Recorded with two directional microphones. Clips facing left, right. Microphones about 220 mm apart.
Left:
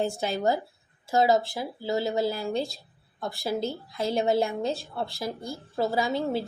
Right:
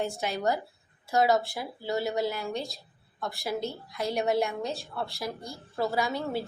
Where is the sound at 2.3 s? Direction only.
30° left (ahead or behind).